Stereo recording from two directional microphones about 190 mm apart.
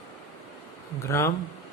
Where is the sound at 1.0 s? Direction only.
15° left (ahead or behind).